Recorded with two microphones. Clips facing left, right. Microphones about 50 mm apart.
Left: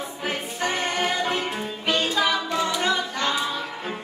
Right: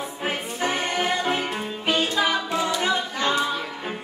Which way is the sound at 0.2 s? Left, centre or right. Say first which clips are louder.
Right 1 dB; centre.